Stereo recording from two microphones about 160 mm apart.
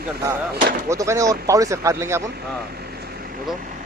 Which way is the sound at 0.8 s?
20° right (ahead or behind).